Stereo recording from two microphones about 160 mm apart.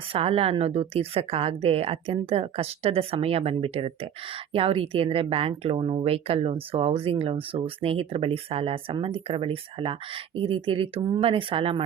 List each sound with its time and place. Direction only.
0.1 s speech: 35° right (ahead or behind)